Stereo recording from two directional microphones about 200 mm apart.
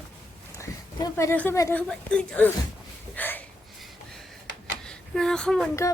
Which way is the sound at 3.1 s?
10° left (ahead or behind).